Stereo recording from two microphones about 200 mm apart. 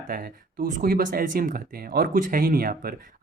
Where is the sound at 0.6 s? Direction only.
45° right (ahead or behind).